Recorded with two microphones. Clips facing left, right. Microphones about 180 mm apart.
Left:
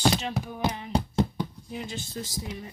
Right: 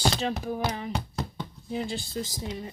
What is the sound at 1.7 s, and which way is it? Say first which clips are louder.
Speech: right 4 dB; 30° right (ahead or behind).